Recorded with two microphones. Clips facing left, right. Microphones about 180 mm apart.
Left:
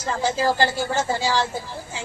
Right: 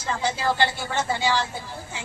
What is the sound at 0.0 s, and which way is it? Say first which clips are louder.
A woman's voice: left 3 dB; 45° left (ahead or behind).